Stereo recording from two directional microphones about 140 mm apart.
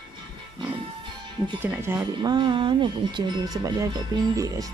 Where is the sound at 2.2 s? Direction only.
35° right (ahead or behind).